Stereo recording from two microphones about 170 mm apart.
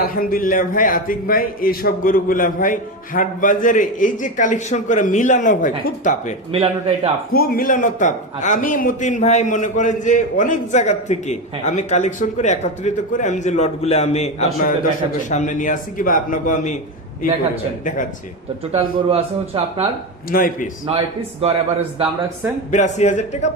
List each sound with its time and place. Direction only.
0.0 s a man's voice: 55° left (ahead or behind)
6.5 s speech: 35° right (ahead or behind)
7.3 s a man's voice: 55° left (ahead or behind)
18.7 s speech: 35° right (ahead or behind)
20.3 s a man's voice: 55° left (ahead or behind)
20.8 s speech: 35° right (ahead or behind)
22.7 s a man's voice: 45° left (ahead or behind)